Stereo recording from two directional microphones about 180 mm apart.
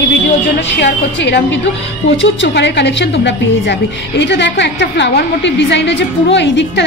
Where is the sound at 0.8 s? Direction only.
75° left (ahead or behind).